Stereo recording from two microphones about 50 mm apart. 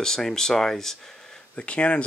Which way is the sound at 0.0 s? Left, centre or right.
Centre.